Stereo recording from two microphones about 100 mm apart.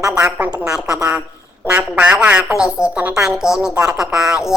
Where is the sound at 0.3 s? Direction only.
10° right (ahead or behind).